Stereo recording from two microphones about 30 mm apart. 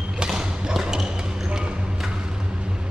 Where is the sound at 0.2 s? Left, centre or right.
Right.